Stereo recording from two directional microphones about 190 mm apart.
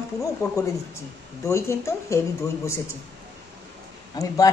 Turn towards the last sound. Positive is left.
turn(degrees=20)  # may be behind; listen again after turning